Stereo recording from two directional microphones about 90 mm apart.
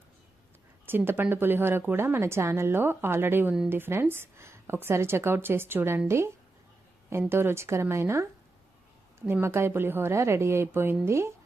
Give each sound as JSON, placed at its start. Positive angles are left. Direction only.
{"t": 0.9, "sound": "speech", "side_deg": -25}